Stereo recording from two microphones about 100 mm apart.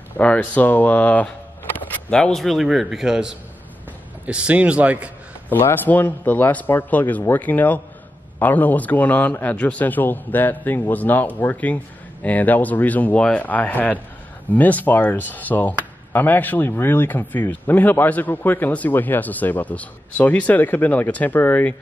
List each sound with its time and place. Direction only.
0.2 s a man's voice: 15° left (ahead or behind); by 5.1 s 15° right (ahead or behind)
5.5 s speech: 20° left (ahead or behind)